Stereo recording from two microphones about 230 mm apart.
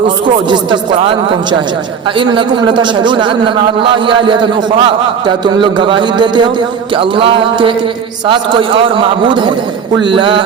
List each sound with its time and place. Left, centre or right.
0.4 s a man's voice: centre